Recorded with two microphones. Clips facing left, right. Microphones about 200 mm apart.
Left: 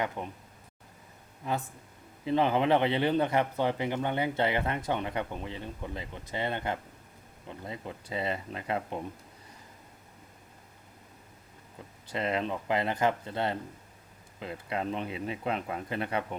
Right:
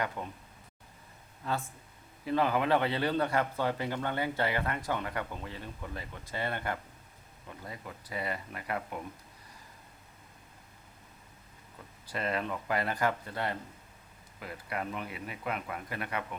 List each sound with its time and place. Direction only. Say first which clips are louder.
0.2 s speech: left 2 dB; 20° left (ahead or behind)
1.4 s speech: left 2 dB; 20° left (ahead or behind)
12.0 s speech: left 3 dB; 20° left (ahead or behind)